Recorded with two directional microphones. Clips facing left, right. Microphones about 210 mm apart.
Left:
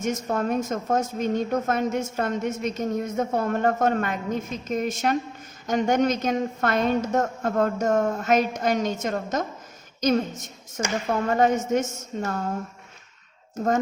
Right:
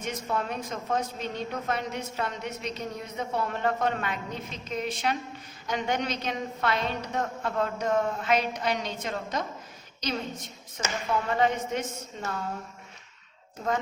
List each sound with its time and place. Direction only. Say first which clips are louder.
0.0 s a woman's voice: left 6 dB; 45° left (ahead or behind)